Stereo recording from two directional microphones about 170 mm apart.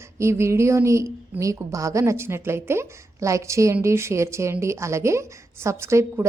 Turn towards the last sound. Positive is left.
turn(degrees=-15)  # may be behind; listen again after turning